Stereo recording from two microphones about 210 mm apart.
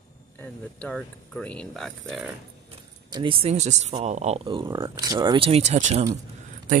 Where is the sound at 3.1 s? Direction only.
25° right (ahead or behind).